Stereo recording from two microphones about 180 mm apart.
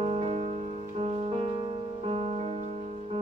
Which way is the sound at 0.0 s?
35° right (ahead or behind).